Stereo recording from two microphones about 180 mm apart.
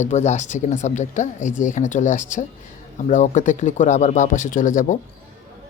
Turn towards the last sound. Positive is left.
turn(degrees=45)  # may be behind; listen again after turning